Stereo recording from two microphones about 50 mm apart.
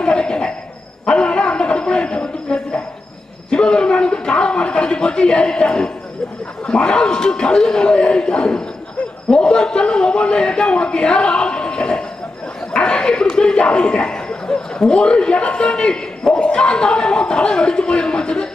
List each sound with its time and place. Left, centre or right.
0.0 s cricket: centre
1.0 s a sound: centre
6.7 s a man's voice: centre